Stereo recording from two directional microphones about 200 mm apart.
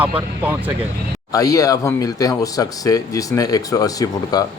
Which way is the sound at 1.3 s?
15° left (ahead or behind).